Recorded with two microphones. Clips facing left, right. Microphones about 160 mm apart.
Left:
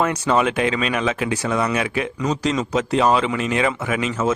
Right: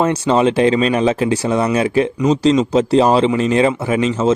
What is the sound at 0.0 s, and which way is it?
Speech, 30° right (ahead or behind).